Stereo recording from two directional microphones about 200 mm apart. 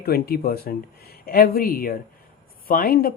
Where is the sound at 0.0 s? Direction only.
50° left (ahead or behind).